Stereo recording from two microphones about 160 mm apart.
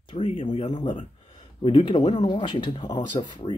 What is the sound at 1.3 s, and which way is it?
Speech, 30° left (ahead or behind).